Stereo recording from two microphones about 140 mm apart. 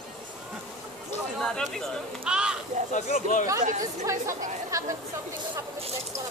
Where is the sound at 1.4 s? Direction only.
5° left (ahead or behind).